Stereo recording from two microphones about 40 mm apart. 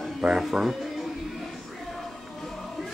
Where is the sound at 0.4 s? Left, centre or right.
Centre.